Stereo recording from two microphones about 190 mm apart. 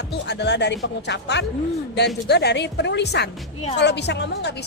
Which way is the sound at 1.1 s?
65° left (ahead or behind).